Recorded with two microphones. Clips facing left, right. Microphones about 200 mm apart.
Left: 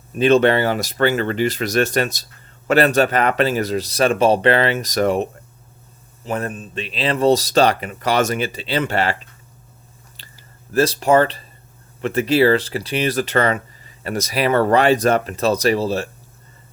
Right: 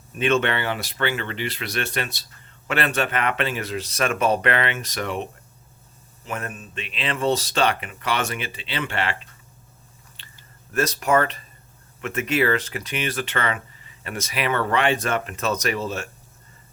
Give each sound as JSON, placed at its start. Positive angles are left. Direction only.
{"t": 0.2, "sound": "speech", "side_deg": 35}
{"t": 10.2, "sound": "chewing", "side_deg": 40}
{"t": 10.7, "sound": "speech", "side_deg": 30}